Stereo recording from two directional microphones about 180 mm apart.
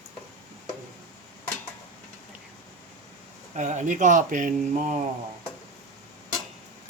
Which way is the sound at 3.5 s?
40° right (ahead or behind).